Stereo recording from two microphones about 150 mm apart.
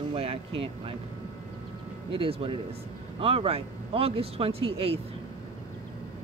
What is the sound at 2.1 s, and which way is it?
Speech, 35° right (ahead or behind).